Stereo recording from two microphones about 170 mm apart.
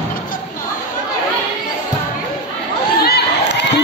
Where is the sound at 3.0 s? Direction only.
80° left.